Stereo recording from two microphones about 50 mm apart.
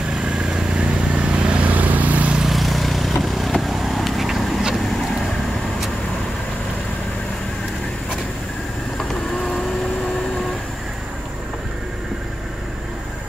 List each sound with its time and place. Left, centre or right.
0.1 s vehicle: centre; by 2.3 s right
2.5 s vehicle: centre